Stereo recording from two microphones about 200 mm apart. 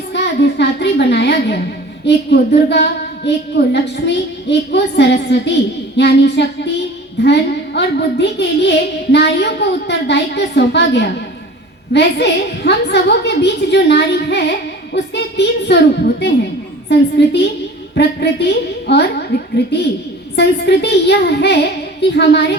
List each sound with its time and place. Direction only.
0.1 s a child's voice: 60° left (ahead or behind)